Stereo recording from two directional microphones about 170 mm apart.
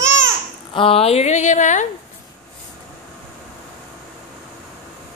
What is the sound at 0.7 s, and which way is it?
Speech, 35° left (ahead or behind).